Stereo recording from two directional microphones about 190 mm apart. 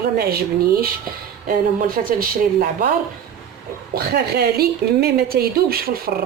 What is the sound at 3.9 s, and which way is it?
Speech, 55° right (ahead or behind).